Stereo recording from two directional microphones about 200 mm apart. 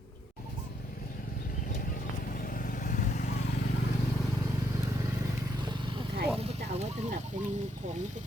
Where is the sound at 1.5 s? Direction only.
45° left (ahead or behind).